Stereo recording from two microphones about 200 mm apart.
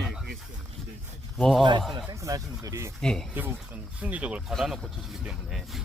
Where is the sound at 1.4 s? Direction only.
5° left (ahead or behind).